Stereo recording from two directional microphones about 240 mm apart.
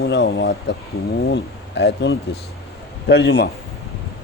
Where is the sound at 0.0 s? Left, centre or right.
Left.